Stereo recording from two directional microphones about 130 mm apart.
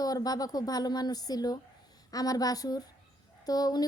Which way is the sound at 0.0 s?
30° left (ahead or behind).